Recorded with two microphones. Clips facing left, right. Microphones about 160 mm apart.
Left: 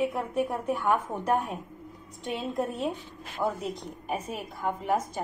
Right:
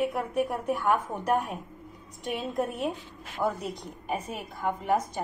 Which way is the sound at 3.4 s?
Centre (ahead or behind).